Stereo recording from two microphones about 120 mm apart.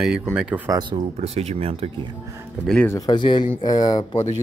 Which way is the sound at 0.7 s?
35° right (ahead or behind).